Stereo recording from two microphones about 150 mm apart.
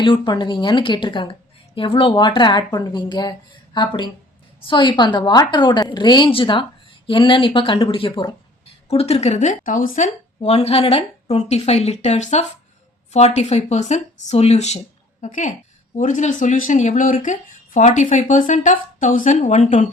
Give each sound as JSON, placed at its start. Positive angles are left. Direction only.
{"t": 0.0, "sound": "a woman's voice", "side_deg": 35}
{"t": 15.2, "sound": "speech", "side_deg": 60}